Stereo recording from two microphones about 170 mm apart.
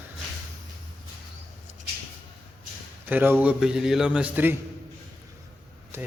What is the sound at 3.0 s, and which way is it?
Speech, 10° right (ahead or behind).